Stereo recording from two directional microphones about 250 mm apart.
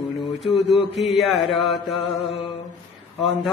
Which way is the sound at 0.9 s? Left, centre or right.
Centre.